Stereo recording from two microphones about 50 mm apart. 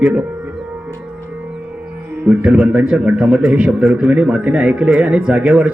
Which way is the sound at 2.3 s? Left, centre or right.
Centre.